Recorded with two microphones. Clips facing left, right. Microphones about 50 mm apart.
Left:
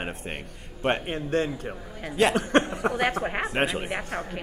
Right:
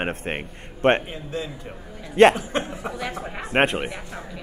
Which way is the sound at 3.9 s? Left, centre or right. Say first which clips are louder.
Left 4 dB; left.